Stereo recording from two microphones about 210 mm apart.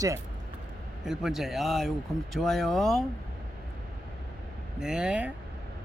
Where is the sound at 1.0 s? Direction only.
Centre (ahead or behind).